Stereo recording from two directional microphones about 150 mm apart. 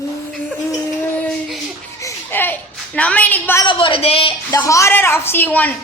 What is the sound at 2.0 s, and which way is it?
Children playing, 15° left (ahead or behind).